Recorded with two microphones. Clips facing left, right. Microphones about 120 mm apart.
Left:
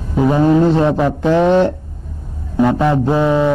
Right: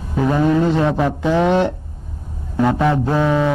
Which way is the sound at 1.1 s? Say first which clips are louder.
Left 3 dB; centre (ahead or behind).